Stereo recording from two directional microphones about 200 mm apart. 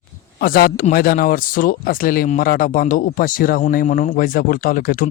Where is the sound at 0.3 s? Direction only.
45° left (ahead or behind).